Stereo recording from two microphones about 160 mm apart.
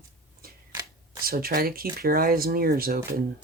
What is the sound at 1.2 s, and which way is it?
Speech, 70° right (ahead or behind).